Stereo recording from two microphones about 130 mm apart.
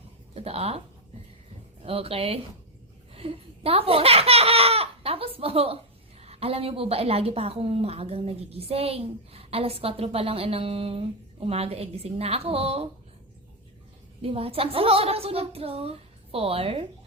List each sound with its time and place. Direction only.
0.3 s speech: 50° right (ahead or behind)
1.8 s speech: 50° right (ahead or behind)
14.2 s speech: 50° right (ahead or behind)